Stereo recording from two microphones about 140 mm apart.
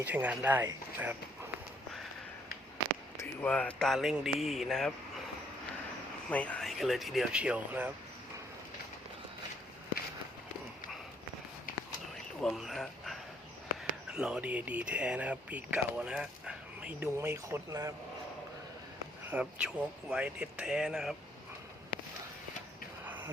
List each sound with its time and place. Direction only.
0.0 s speech: 10° right (ahead or behind)
3.4 s speech: 10° left (ahead or behind)
6.3 s speech: 10° left (ahead or behind); by 7.9 s 10° right (ahead or behind)
12.4 s speech: centre (ahead or behind)
17.2 s speech: 20° right (ahead or behind)
19.3 s speech: 10° right (ahead or behind)
23.0 s a sound: 10° right (ahead or behind)